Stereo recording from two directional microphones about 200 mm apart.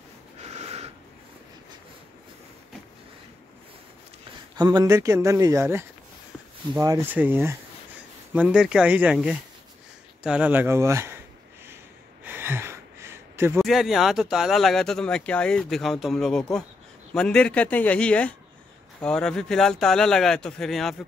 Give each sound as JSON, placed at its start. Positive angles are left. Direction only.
{"t": 0.4, "sound": "snort", "side_deg": -30}
{"t": 4.6, "sound": "speech", "side_deg": -20}
{"t": 10.2, "sound": "a sound", "side_deg": -5}
{"t": 13.6, "sound": "speech", "side_deg": 0}